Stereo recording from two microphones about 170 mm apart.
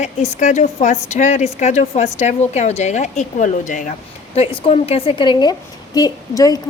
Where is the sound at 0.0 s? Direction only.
45° left (ahead or behind).